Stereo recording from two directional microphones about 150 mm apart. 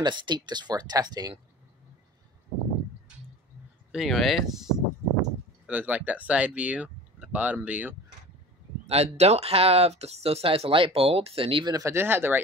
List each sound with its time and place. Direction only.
0.0 s speech: 30° right (ahead or behind)
3.9 s speech: centre (ahead or behind)
8.8 s speech: 45° right (ahead or behind); by 12.4 s 15° right (ahead or behind)